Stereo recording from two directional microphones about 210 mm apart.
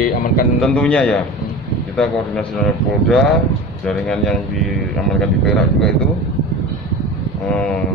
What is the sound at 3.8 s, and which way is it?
Speech, centre (ahead or behind).